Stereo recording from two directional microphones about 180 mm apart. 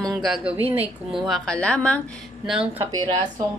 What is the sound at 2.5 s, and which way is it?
Speech, 5° right (ahead or behind).